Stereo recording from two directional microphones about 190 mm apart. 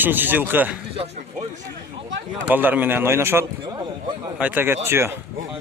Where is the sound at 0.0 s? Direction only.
10° right (ahead or behind).